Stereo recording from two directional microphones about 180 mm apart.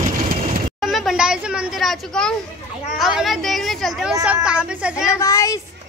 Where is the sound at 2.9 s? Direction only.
Centre (ahead or behind).